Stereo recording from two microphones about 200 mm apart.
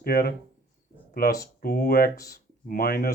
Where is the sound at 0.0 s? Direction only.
50° left (ahead or behind).